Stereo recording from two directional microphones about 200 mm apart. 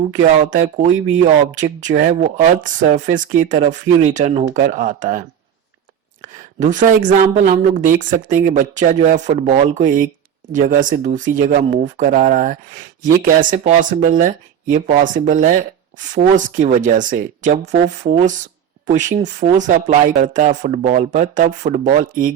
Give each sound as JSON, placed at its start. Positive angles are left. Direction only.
{"t": 0.5, "sound": "speech", "side_deg": -40}
{"t": 6.2, "sound": "speech", "side_deg": -40}